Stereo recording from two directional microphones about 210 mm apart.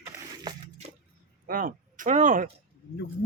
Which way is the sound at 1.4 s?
40° right (ahead or behind).